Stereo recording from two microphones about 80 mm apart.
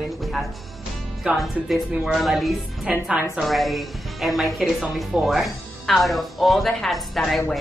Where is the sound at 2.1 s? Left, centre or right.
Centre.